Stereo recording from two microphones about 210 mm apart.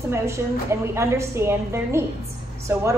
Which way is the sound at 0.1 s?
15° right (ahead or behind).